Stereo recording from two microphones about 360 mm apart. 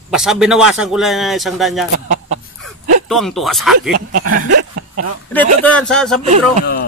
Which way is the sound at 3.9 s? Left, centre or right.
Right.